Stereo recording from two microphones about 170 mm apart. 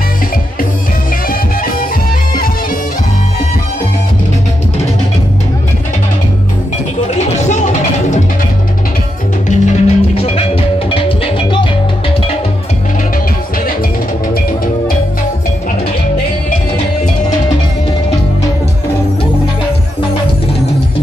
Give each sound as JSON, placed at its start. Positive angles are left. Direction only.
{"t": 7.2, "sound": "music", "side_deg": 40}
{"t": 9.5, "sound": "music", "side_deg": 40}